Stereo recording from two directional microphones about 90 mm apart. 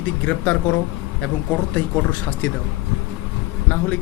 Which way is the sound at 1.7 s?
15° left (ahead or behind).